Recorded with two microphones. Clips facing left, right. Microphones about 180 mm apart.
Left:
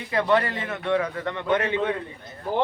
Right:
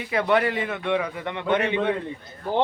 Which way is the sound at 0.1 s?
10° right (ahead or behind).